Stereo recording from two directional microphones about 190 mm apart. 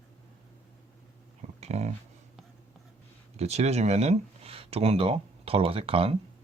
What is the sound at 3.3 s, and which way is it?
Speech, 35° right (ahead or behind).